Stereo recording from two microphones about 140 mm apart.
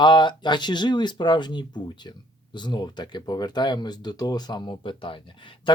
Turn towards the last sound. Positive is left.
turn(degrees=35)  # may be behind; listen again after turning